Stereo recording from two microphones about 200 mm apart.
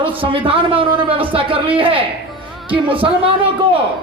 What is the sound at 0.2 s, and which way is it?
A man's voice, 25° right (ahead or behind).